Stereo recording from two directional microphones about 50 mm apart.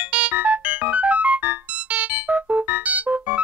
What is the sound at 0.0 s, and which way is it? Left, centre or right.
Music, right.